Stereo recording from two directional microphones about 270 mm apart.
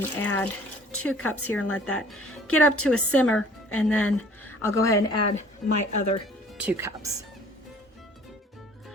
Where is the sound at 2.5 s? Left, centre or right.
Left.